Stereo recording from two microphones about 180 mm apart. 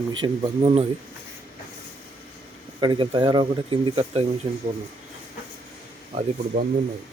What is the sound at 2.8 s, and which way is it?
Speech, 25° right (ahead or behind).